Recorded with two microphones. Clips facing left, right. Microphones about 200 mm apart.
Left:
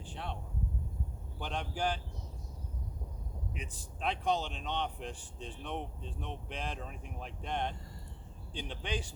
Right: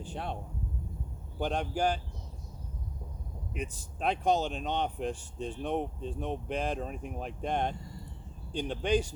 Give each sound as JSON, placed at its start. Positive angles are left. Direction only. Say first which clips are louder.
{"t": 0.0, "sound": "speech", "louder": "right 5 dB", "side_deg": -45}
{"t": 1.4, "sound": "speech", "louder": "right 6 dB", "side_deg": -45}
{"t": 3.5, "sound": "speech", "louder": "right 7 dB", "side_deg": -45}